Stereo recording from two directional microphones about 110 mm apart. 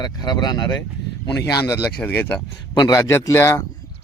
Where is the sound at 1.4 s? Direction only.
30° left (ahead or behind).